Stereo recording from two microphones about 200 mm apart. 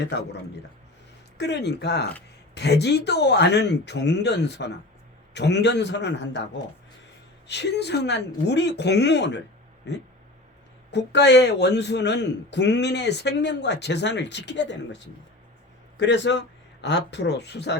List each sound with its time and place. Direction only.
0.0 s a man's voice: 60° left (ahead or behind)
1.4 s a man's voice: 60° left (ahead or behind)